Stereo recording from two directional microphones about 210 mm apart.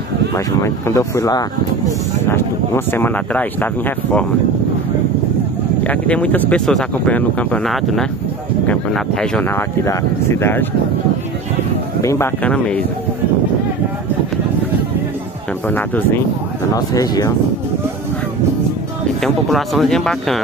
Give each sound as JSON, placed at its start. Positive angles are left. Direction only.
{"t": 0.6, "sound": "speech", "side_deg": 15}
{"t": 5.9, "sound": "speech", "side_deg": 5}
{"t": 12.0, "sound": "speech", "side_deg": 15}
{"t": 15.7, "sound": "speech", "side_deg": 10}
{"t": 19.2, "sound": "speech", "side_deg": 0}